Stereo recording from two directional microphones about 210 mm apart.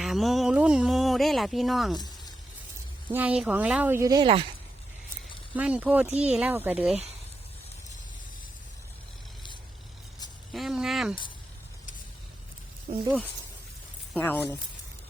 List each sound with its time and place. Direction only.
0.0 s a sound: centre (ahead or behind)
3.1 s speech: 5° right (ahead or behind)
5.5 s speech: 5° right (ahead or behind)
10.5 s speech: centre (ahead or behind)
14.1 s speech: 10° left (ahead or behind)